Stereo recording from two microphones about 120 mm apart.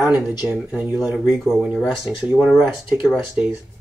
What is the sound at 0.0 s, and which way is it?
Speech, 35° left (ahead or behind).